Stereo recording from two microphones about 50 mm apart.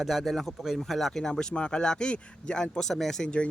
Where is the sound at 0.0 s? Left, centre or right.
Centre.